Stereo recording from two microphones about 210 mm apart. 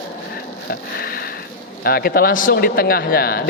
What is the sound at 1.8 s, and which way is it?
Speech, 45° left (ahead or behind).